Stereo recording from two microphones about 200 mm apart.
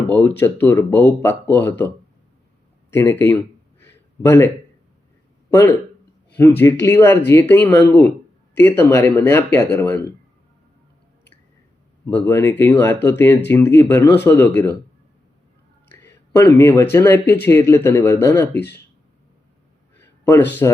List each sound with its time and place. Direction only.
0.1 s speech: 10° left (ahead or behind)
2.9 s a sound: 10° left (ahead or behind)
5.5 s speech: 10° left (ahead or behind)
12.1 s speech: 10° left (ahead or behind)
16.4 s speech: 10° left (ahead or behind)
18.5 s speech: 55° left (ahead or behind)
20.0 s a sound: 10° left (ahead or behind)
20.6 s speech: 15° left (ahead or behind)